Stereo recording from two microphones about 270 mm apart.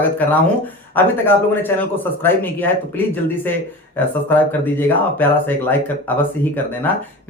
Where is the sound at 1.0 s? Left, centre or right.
Centre.